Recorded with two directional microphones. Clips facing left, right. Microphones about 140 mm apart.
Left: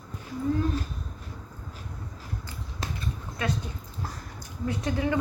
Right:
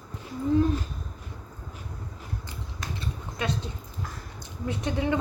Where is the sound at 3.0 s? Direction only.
25° right (ahead or behind).